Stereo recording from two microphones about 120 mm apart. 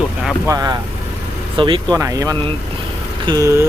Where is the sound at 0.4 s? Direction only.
30° right (ahead or behind).